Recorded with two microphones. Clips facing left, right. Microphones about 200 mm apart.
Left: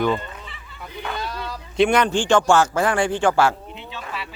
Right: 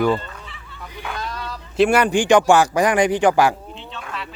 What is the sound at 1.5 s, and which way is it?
A man's voice, 5° right (ahead or behind).